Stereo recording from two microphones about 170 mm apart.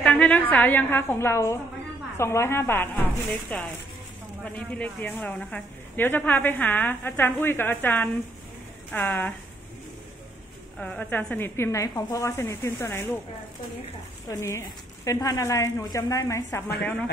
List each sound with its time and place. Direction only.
0.0 s a woman's voice: 10° left (ahead or behind)
10.8 s a woman's voice: 10° left (ahead or behind)
14.3 s a woman's voice: 15° left (ahead or behind)